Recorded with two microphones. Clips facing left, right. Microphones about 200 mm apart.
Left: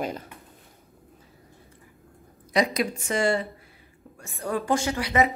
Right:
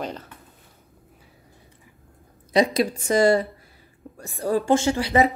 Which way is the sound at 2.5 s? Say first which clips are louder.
Right 4 dB; 30° right (ahead or behind).